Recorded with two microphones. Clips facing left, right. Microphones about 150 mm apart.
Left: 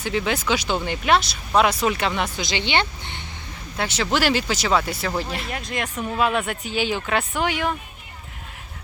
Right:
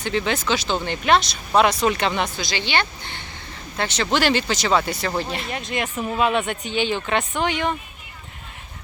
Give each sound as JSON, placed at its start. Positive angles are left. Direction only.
{"t": 0.0, "sound": "speech", "side_deg": 5}
{"t": 2.3, "sound": "speech", "side_deg": 20}
{"t": 3.8, "sound": "speech", "side_deg": 5}